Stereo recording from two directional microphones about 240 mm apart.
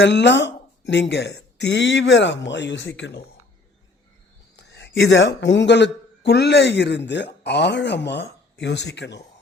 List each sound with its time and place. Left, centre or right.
0.0 s speech: left
4.5 s speech: left